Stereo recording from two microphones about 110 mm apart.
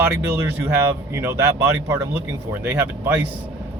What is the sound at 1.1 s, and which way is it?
Speech, 25° right (ahead or behind).